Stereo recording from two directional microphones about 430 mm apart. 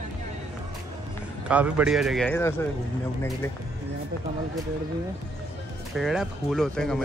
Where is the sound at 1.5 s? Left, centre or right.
Centre.